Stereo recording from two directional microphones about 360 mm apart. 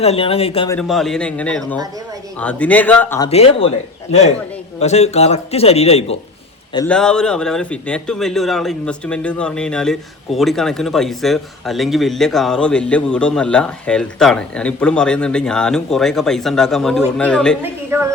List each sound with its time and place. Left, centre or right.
0.0 s a man's voice: centre
0.8 s a man's voice: centre
3.2 s a man's voice: centre
6.7 s a man's voice: centre